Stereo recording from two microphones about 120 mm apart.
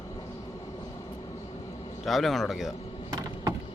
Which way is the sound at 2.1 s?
Centre (ahead or behind).